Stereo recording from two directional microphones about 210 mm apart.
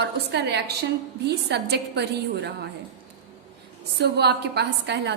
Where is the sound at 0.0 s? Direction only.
55° right (ahead or behind).